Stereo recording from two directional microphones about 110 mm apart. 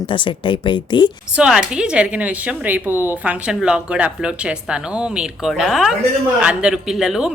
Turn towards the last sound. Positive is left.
turn(degrees=-5)  # may be behind; listen again after turning